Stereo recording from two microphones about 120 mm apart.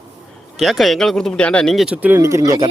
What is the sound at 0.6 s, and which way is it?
Speech, centre (ahead or behind).